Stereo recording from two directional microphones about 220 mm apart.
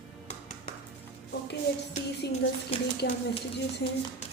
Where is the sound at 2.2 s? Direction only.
50° left (ahead or behind).